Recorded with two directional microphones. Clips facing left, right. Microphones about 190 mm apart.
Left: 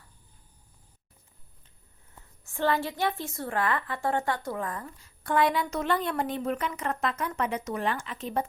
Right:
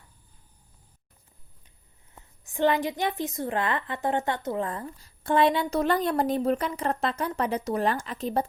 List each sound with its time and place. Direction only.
2.4 s a woman's voice: 15° right (ahead or behind); by 8.4 s 35° right (ahead or behind)